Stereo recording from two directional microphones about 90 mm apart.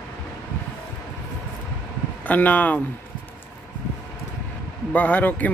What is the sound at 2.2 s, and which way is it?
Speech, 20° left (ahead or behind).